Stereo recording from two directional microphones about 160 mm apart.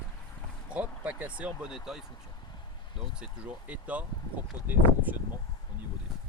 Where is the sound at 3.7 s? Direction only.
10° right (ahead or behind).